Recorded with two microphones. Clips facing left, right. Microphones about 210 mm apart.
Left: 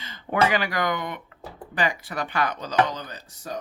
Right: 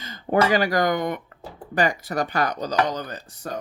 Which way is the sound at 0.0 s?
40° right (ahead or behind).